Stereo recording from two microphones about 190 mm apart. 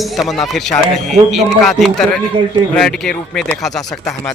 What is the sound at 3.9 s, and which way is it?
Speech, 15° left (ahead or behind).